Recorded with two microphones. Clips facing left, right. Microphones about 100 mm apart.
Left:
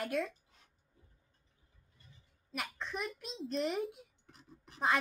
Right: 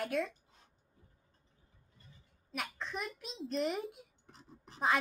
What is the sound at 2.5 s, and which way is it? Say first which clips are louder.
Speech: even; centre (ahead or behind).